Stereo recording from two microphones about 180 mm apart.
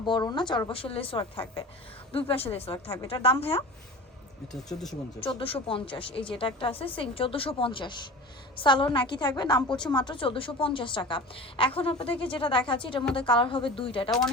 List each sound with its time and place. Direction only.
0.0 s a woman's voice: 25° left (ahead or behind)
4.5 s speech: centre (ahead or behind)
5.2 s a woman's voice: 30° left (ahead or behind)